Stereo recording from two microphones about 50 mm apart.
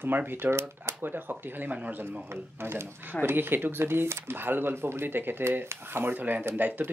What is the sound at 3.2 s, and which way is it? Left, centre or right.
Speech, right.